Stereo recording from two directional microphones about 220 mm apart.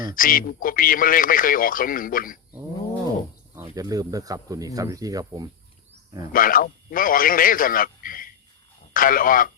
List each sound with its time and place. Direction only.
0.1 s speech: 40° left (ahead or behind)
2.5 s a sound: 15° right (ahead or behind)
3.8 s speech: 15° right (ahead or behind)
6.3 s a man's voice: 40° left (ahead or behind)